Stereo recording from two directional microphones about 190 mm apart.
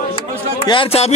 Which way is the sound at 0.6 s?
30° left (ahead or behind).